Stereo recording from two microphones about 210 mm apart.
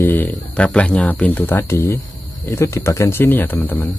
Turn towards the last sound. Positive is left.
turn(degrees=10)  # may be behind; listen again after turning